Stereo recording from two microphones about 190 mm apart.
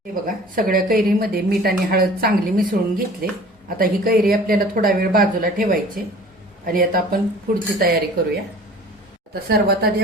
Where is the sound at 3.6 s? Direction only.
50° right (ahead or behind).